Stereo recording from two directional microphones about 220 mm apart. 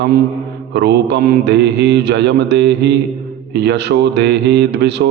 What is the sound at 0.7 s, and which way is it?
Speech, 50° right (ahead or behind).